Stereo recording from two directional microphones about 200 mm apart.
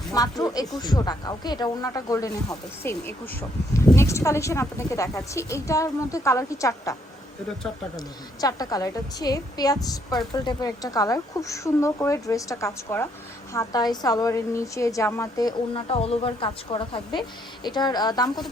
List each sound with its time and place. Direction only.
0.1 s a woman's voice: 20° left (ahead or behind)
7.9 s a woman's voice: 20° left (ahead or behind)